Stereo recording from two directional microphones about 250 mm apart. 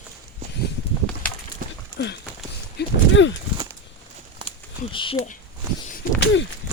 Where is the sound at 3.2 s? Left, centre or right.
Left.